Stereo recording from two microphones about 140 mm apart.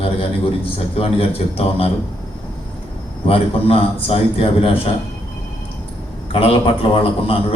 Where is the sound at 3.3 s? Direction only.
40° left (ahead or behind).